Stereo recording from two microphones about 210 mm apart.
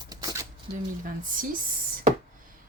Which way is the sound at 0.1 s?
15° right (ahead or behind).